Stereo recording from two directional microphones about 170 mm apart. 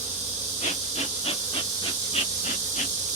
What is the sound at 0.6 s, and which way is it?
Hiss, 35° left (ahead or behind).